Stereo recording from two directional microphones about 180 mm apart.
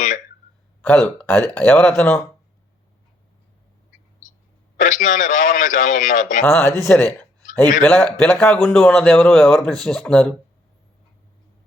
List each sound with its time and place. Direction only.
0.9 s speech: 10° left (ahead or behind)
4.8 s a man's voice: 45° left (ahead or behind)
6.4 s speech: 15° left (ahead or behind)